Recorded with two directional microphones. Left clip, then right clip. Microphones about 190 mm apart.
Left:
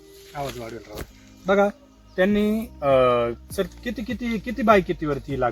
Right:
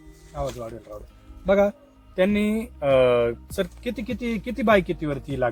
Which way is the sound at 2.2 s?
25° right (ahead or behind).